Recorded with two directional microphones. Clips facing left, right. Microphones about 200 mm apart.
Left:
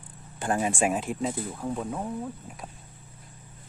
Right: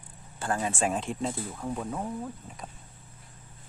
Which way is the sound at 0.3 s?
20° left (ahead or behind).